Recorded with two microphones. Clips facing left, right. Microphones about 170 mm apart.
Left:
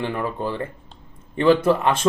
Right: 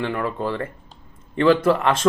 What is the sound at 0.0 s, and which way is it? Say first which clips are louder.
Speech: right 1 dB; 20° left (ahead or behind).